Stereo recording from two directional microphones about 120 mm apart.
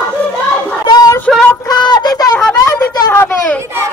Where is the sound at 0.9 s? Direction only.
35° left (ahead or behind).